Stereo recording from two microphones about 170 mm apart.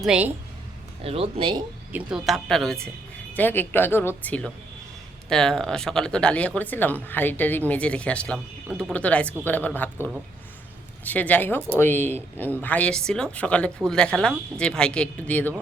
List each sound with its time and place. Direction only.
0.0 s a woman's voice: 5° right (ahead or behind)
1.0 s speech: 35° right (ahead or behind)
1.9 s speech: 5° right (ahead or behind); by 15.5 s 10° left (ahead or behind)